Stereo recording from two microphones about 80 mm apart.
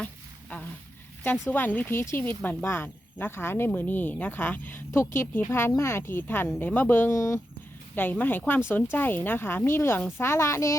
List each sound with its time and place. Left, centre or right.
1.2 s speech: left
7.2 s speech: left
7.9 s speech: left